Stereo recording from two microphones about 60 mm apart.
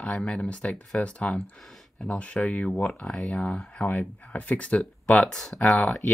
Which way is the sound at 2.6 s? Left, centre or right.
Centre.